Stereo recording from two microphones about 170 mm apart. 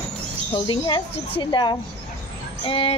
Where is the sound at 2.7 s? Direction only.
30° left (ahead or behind).